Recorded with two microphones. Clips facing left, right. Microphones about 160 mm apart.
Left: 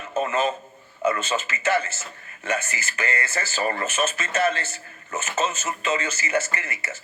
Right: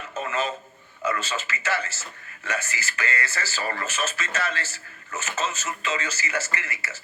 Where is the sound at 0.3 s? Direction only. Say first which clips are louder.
Left 4 dB; 25° left (ahead or behind).